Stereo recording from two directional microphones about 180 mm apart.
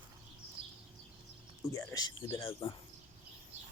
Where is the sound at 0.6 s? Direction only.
30° right (ahead or behind).